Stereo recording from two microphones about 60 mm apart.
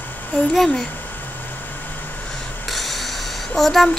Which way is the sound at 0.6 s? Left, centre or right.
Centre.